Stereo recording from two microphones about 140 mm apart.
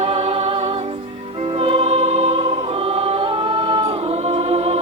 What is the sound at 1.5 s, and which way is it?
Music, 45° right (ahead or behind).